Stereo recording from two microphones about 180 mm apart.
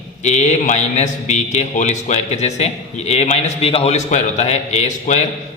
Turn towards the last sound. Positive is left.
turn(degrees=40)  # may be behind; listen again after turning